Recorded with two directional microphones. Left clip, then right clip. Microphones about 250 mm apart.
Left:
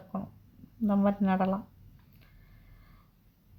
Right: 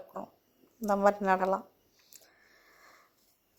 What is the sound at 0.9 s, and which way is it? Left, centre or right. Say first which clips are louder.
Speech: right 4 dB; right.